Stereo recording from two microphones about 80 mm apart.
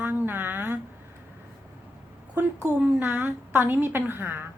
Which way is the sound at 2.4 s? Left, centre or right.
Right.